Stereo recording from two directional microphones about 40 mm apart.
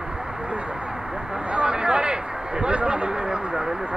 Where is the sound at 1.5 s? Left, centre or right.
Right.